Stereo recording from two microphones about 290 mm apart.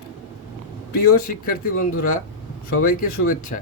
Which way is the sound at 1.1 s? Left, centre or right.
Left.